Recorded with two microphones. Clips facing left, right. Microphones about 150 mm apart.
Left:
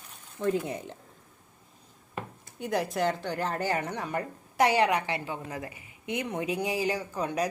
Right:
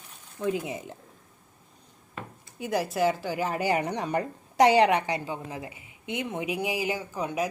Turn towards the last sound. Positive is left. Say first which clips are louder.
# even
turn(degrees=-5)  # may be behind; listen again after turning